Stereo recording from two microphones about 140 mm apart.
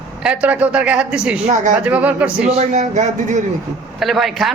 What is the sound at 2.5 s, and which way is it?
Speech, 50° right (ahead or behind).